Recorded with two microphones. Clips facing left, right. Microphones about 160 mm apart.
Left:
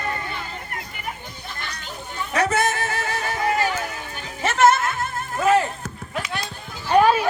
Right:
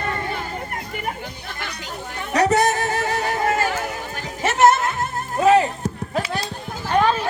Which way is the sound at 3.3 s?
45° right (ahead or behind).